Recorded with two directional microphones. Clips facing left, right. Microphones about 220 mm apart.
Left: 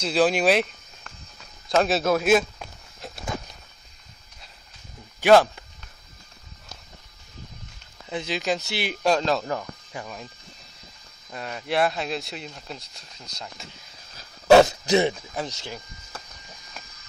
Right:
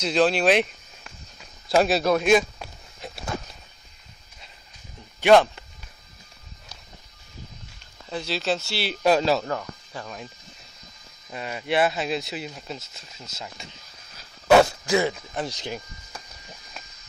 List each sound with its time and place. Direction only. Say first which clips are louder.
0.1 s speech: even; 10° left (ahead or behind)
0.5 s a sound: right 1 dB; centre (ahead or behind)
5.2 s speech: even; 5° left (ahead or behind)
8.1 s speech: even; 15° left (ahead or behind)
9.0 s speech: right 2 dB; 5° right (ahead or behind)
9.4 s speech: even; 10° left (ahead or behind)
11.3 s speech: right 2 dB; 5° right (ahead or behind)
14.6 s speech: left 2 dB; 20° left (ahead or behind)
15.4 s speech: right 4 dB; 15° right (ahead or behind)